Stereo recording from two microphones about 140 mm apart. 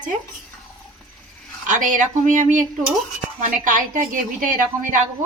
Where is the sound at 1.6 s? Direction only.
65° right (ahead or behind).